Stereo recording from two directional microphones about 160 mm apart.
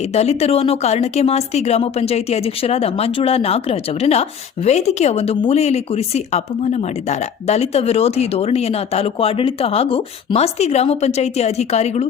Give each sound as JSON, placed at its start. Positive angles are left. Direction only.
{"t": 0.1, "sound": "speech", "side_deg": 40}